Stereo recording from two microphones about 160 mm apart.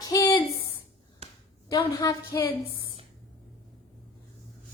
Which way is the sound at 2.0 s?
20° left (ahead or behind).